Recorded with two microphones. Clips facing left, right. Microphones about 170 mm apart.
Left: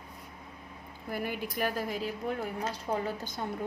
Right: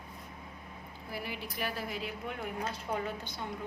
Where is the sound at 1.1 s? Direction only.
50° left (ahead or behind).